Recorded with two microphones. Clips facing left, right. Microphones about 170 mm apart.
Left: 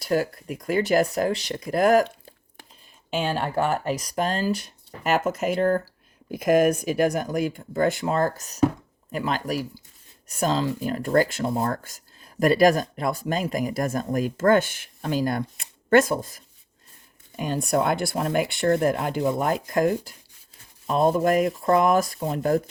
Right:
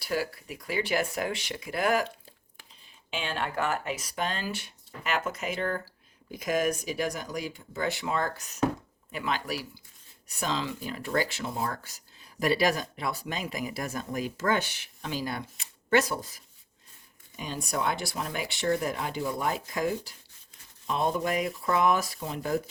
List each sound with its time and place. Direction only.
0.0 s speech: 45° left (ahead or behind)
3.1 s speech: 40° left (ahead or behind)